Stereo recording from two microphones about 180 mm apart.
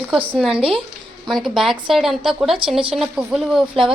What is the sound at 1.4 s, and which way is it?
Speech, centre (ahead or behind).